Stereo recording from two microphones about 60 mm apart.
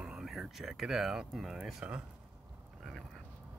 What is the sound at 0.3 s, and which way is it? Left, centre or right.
Speech, centre.